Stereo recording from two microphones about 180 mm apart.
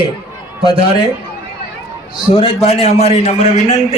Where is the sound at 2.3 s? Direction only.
35° left (ahead or behind).